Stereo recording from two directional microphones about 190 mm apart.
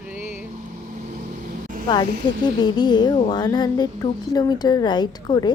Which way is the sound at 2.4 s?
20° left (ahead or behind).